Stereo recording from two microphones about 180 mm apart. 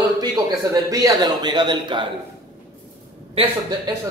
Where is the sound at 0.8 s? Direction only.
20° right (ahead or behind).